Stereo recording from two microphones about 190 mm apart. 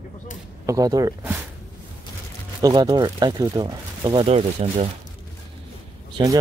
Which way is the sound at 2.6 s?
20° right (ahead or behind).